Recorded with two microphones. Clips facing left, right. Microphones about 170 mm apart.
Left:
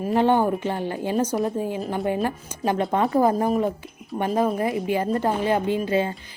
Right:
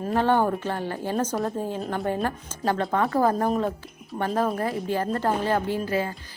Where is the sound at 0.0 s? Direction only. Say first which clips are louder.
Left 2 dB; 15° left (ahead or behind).